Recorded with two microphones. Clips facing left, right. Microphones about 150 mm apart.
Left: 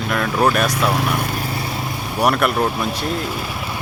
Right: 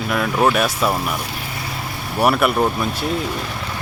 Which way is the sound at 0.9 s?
75° left (ahead or behind).